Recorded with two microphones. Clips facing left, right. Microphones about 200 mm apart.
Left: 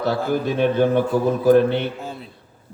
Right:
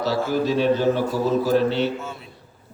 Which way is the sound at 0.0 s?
55° left (ahead or behind).